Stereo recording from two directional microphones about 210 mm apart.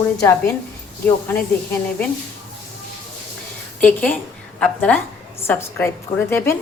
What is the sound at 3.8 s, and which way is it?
A woman's voice, 5° left (ahead or behind).